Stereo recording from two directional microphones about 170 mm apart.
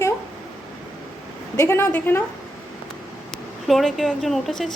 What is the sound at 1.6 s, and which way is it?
Speech, 15° left (ahead or behind).